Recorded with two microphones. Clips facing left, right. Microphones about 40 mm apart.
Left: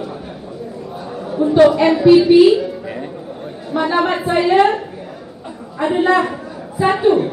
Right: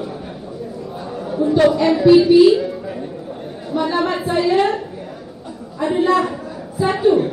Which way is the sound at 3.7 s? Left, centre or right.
Left.